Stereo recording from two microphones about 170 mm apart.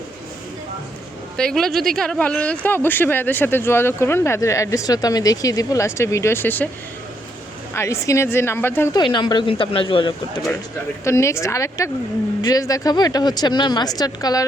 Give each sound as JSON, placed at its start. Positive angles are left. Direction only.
{"t": 1.4, "sound": "speech", "side_deg": 5}
{"t": 7.7, "sound": "speech", "side_deg": 15}
{"t": 9.1, "sound": "speech", "side_deg": 25}
{"t": 11.0, "sound": "speech", "side_deg": 15}